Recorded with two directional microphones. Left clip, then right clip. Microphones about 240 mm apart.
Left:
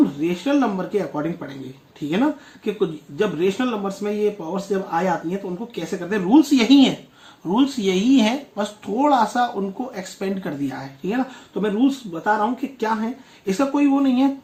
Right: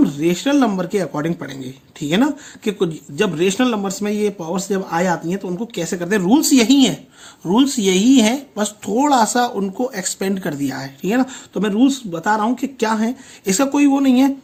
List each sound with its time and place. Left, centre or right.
0.2 s speech: right